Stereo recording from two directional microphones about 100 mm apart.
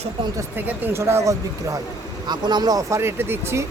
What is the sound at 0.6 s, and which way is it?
Speech, 20° right (ahead or behind).